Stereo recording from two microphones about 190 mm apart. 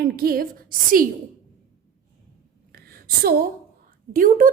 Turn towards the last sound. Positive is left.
turn(degrees=-45)  # may be behind; listen again after turning